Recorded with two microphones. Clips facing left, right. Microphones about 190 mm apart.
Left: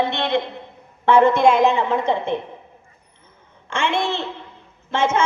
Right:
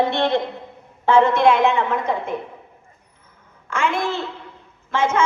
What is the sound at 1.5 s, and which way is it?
Speech, 35° left (ahead or behind).